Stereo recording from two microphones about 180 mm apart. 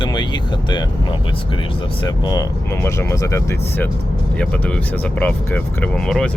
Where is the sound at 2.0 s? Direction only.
25° left (ahead or behind).